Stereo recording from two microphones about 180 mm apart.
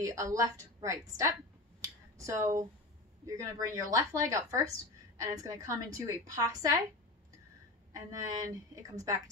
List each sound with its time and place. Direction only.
0.0 s a woman's voice: 15° right (ahead or behind)
7.9 s a woman's voice: 20° right (ahead or behind)